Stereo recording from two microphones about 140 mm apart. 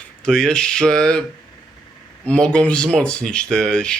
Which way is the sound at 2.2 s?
5° left (ahead or behind).